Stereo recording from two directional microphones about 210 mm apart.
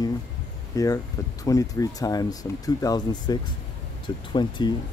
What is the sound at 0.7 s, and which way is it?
Speech, 15° left (ahead or behind).